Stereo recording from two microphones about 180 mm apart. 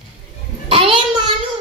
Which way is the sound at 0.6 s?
30° right (ahead or behind).